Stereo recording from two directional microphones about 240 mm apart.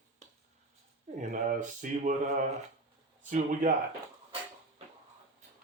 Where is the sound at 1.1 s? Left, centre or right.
Right.